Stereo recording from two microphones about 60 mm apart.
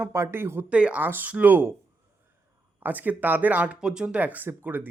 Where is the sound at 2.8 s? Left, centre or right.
Right.